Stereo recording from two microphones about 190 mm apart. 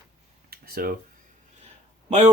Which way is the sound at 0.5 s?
55° right (ahead or behind).